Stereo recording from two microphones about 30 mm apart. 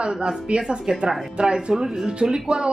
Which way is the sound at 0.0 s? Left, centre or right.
Right.